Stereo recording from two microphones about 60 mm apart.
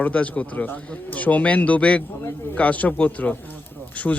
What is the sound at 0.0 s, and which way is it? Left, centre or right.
A man's voice, left.